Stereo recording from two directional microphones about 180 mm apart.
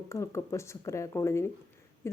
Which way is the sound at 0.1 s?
15° left (ahead or behind).